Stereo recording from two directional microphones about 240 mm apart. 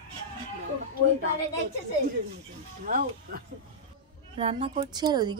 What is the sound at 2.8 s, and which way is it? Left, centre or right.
Speech, right.